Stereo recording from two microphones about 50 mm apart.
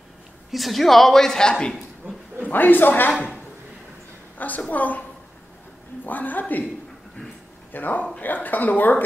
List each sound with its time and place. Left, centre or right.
0.5 s a man's voice: centre
2.0 s a sound: right
2.4 s speech: left
4.4 s speech: left
6.0 s speech: left
7.7 s speech: left